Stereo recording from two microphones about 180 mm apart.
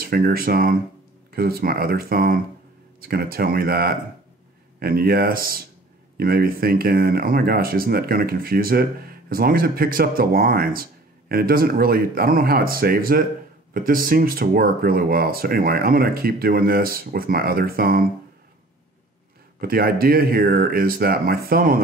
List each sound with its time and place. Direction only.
0.0 s speech: 55° right (ahead or behind)
19.6 s speech: 55° right (ahead or behind)